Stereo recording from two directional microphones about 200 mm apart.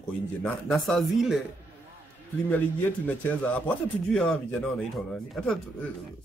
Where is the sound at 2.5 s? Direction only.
10° left (ahead or behind).